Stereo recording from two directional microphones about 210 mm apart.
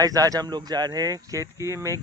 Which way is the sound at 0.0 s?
15° right (ahead or behind).